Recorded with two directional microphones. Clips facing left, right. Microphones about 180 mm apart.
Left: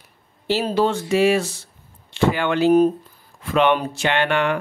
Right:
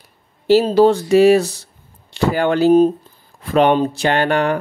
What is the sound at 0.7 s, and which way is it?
Speech, 35° right (ahead or behind).